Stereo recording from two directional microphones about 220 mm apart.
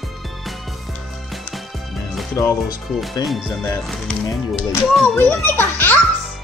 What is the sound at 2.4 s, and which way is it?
Music, 15° left (ahead or behind).